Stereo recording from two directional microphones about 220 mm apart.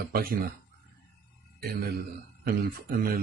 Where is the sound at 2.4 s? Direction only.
45° right (ahead or behind).